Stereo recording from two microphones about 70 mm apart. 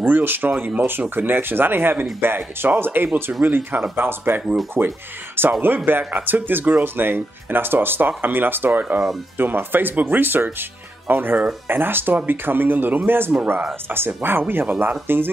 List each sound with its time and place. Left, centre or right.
0.0 s speech: right